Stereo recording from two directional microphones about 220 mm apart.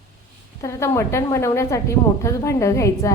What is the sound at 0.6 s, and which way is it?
A woman's voice, 15° left (ahead or behind).